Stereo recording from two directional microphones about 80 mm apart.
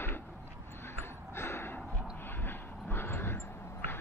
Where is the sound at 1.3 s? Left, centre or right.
Left.